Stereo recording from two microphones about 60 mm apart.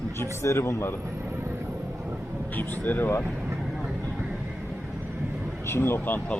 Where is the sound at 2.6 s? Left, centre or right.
Left.